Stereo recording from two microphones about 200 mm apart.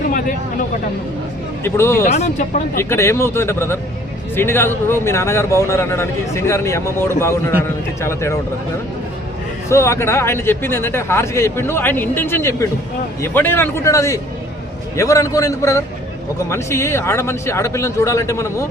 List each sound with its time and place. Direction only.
1.6 s speech: 10° left (ahead or behind)
2.0 s speech: 30° left (ahead or behind)
2.7 s speech: 10° left (ahead or behind)
9.6 s speech: 15° left (ahead or behind)